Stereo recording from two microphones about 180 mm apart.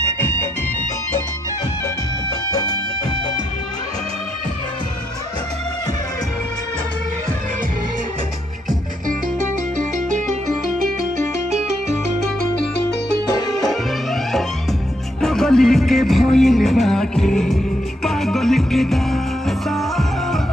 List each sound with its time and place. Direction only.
0.0 s music: 15° left (ahead or behind)
2.5 s music: 20° left (ahead or behind)
9.8 s music: 45° right (ahead or behind)
13.7 s music: centre (ahead or behind)